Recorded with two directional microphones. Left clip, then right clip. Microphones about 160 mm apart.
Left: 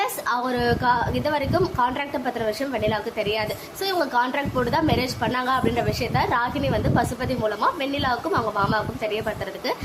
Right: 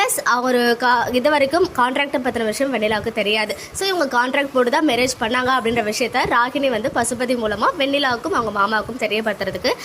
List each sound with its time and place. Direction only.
0.0 s a woman's voice: 25° right (ahead or behind)